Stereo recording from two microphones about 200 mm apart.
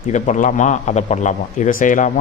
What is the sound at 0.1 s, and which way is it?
A man's voice, 40° left (ahead or behind).